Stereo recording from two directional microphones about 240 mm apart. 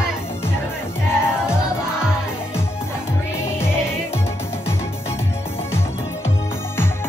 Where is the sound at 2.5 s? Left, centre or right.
Centre.